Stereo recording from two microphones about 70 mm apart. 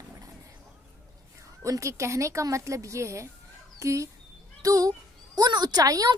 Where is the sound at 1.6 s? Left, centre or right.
Right.